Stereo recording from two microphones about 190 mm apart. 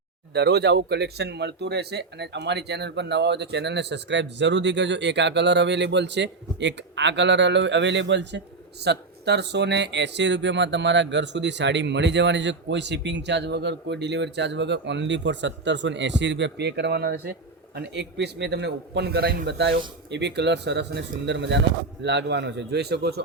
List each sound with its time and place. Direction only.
0.3 s speech: 60° right (ahead or behind)